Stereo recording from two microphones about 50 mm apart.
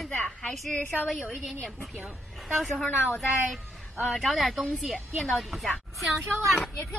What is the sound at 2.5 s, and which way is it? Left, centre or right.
Speech, centre.